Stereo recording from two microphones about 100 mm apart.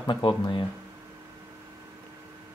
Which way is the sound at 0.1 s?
55° left (ahead or behind).